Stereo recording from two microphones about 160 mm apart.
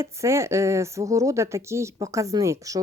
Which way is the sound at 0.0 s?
15° right (ahead or behind).